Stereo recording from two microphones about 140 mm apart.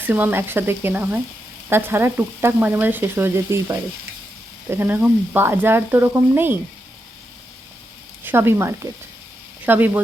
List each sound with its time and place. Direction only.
0.0 s frying: 15° right (ahead or behind)
8.2 s frying: 15° right (ahead or behind)